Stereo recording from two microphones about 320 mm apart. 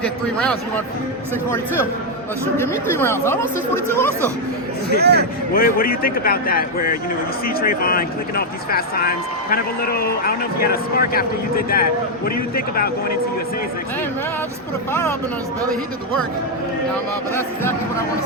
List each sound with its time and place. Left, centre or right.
0.0 s a man's voice: centre
2.6 s speech: centre
4.9 s speech: right
5.5 s speech: left